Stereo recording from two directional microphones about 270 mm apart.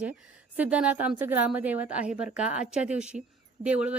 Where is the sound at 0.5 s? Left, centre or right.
Centre.